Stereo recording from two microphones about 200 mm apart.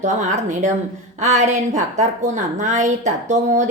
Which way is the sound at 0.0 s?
35° right (ahead or behind).